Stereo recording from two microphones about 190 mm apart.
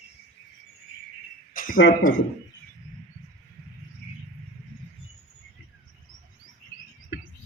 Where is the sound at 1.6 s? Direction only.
50° left (ahead or behind).